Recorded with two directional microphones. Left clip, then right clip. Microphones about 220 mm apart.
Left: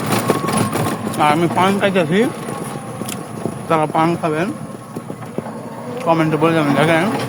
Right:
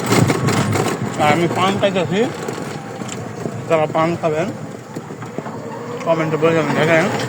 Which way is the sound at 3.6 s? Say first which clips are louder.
Even; 25° left (ahead or behind).